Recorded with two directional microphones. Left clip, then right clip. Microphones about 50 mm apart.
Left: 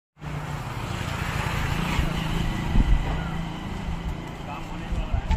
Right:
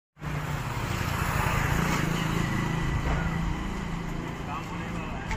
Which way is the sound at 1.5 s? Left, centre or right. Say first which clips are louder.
Right 1 dB; right.